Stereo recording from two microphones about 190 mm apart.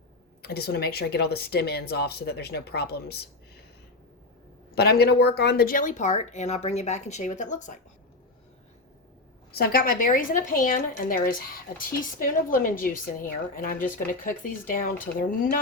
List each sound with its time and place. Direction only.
0.4 s speech: 55° left (ahead or behind)
4.7 s speech: 60° left (ahead or behind); by 7.8 s 40° left (ahead or behind)
9.5 s a woman's voice: 50° left (ahead or behind)
13.6 s a woman's voice: 45° left (ahead or behind)